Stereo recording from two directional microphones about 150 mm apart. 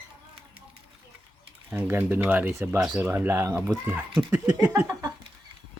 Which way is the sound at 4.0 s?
10° right (ahead or behind).